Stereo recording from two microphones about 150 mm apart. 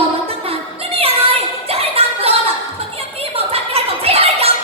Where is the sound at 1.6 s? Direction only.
40° right (ahead or behind).